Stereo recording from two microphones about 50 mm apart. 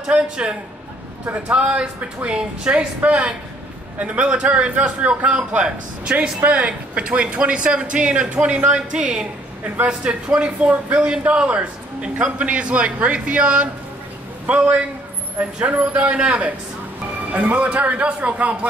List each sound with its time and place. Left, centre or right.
0.0 s a man's voice: centre